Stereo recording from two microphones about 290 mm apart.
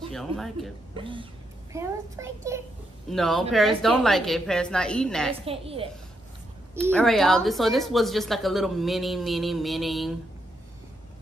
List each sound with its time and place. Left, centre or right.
0.1 s speech: centre
0.9 s a child's voice: centre
3.1 s speech: centre
5.4 s a woman's voice: centre
6.9 s speech: centre